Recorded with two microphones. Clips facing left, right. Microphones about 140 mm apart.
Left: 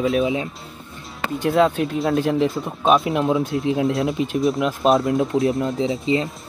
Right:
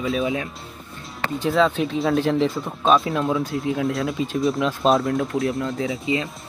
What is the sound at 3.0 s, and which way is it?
Speech, 20° left (ahead or behind).